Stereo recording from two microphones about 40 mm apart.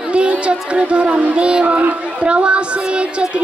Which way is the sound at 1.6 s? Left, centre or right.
Right.